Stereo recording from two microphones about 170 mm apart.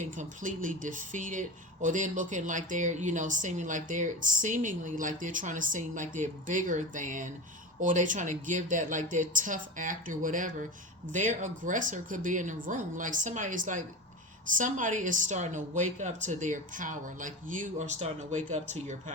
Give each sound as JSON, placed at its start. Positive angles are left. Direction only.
{"t": 0.0, "sound": "speech", "side_deg": -50}